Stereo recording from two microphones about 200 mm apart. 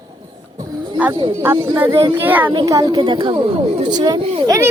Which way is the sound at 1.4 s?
10° right (ahead or behind).